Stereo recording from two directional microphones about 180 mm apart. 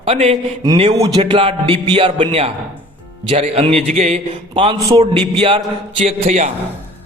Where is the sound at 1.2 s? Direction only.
30° right (ahead or behind).